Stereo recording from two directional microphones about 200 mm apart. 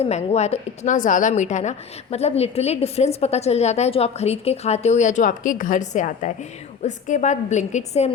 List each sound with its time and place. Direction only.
0.0 s a woman's voice: 35° left (ahead or behind)